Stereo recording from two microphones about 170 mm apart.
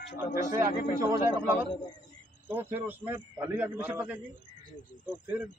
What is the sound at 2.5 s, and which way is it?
Speech, 15° right (ahead or behind).